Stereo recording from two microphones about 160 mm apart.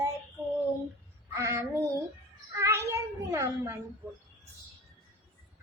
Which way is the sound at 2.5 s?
20° right (ahead or behind).